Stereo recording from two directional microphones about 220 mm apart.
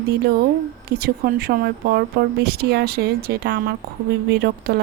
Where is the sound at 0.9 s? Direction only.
45° right (ahead or behind).